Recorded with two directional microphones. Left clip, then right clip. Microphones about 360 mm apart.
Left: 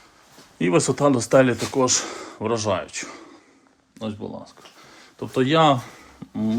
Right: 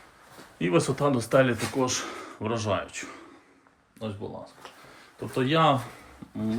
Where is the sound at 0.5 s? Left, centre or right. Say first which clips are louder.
Left 5 dB; centre.